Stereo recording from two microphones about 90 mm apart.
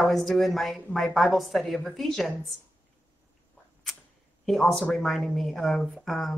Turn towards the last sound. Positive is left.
turn(degrees=0)  # may be behind; listen again after turning